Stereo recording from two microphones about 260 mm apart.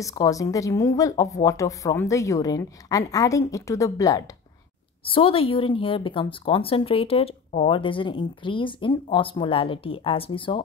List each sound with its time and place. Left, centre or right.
0.0 s a woman's voice: centre